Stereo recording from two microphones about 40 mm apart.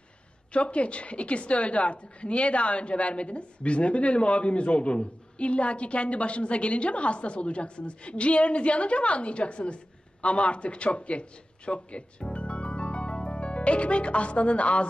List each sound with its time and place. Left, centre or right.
0.5 s a woman's voice: left